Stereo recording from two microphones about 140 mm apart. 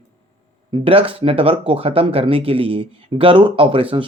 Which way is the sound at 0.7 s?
40° right (ahead or behind).